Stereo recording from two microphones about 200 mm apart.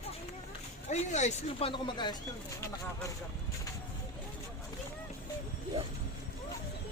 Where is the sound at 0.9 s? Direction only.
35° left (ahead or behind).